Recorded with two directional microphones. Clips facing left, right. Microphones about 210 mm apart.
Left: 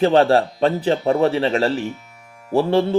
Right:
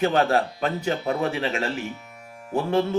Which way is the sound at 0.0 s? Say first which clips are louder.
Left 6 dB; 35° left (ahead or behind).